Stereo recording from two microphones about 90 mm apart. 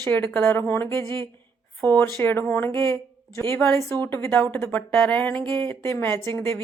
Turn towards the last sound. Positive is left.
turn(degrees=30)  # may be behind; listen again after turning